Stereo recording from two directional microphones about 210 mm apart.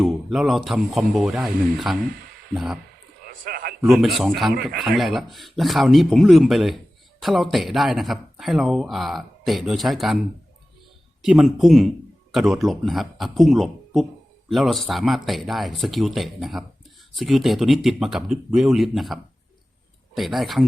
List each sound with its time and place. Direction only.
0.0 s speech: centre (ahead or behind)
3.4 s a sound: 45° right (ahead or behind)
3.8 s speech: centre (ahead or behind)
11.2 s speech: centre (ahead or behind)